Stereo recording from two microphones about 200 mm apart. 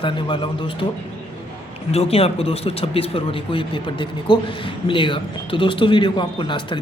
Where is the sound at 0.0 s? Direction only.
25° left (ahead or behind).